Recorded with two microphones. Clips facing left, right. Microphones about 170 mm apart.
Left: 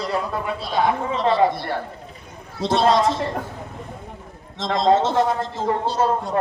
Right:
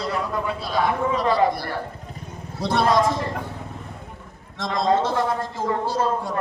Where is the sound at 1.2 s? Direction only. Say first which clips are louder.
Left 3 dB; 25° left (ahead or behind).